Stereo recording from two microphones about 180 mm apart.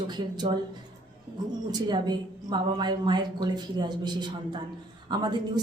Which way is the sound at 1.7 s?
25° right (ahead or behind).